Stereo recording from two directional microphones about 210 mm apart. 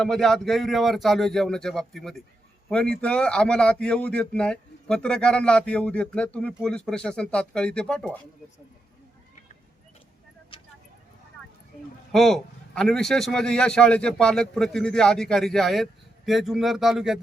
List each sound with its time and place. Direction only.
0.0 s a man's voice: centre (ahead or behind)
10.5 s vehicle: 25° left (ahead or behind)
12.1 s a man's voice: centre (ahead or behind)